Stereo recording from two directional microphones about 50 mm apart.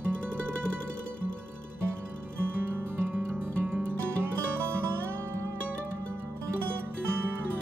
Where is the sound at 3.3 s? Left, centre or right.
Right.